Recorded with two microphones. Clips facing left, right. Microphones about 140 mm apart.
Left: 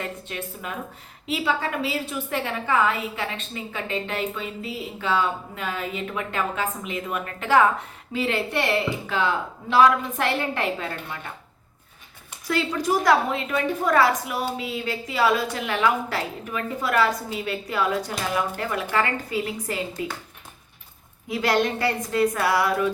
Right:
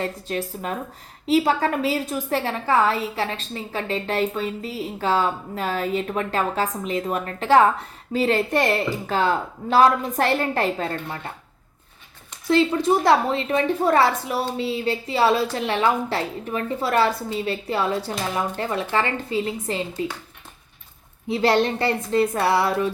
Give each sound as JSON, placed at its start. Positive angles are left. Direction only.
{"t": 0.0, "sound": "a woman's voice", "side_deg": -35}
{"t": 12.5, "sound": "a woman's voice", "side_deg": -25}
{"t": 21.2, "sound": "a woman's voice", "side_deg": -30}